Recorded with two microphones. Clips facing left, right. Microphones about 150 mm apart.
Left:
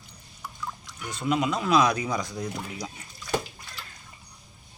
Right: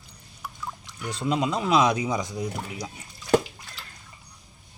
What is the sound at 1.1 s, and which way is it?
Speech, 30° right (ahead or behind).